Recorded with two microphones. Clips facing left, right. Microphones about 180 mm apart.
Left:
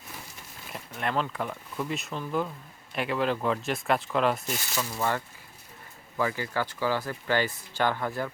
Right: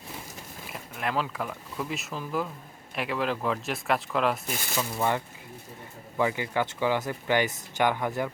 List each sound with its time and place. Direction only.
0.7 s speech: centre (ahead or behind)
4.9 s speech: 15° right (ahead or behind)